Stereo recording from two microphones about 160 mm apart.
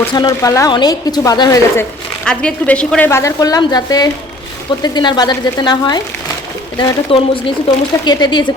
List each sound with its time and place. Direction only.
0.1 s a woman's voice: 25° left (ahead or behind)
2.2 s a woman's voice: 5° left (ahead or behind); by 8.5 s 30° left (ahead or behind)